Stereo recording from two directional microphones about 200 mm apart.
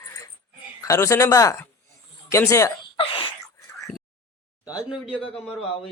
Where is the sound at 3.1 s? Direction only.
20° left (ahead or behind).